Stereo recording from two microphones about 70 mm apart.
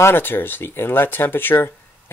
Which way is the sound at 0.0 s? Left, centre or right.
Left.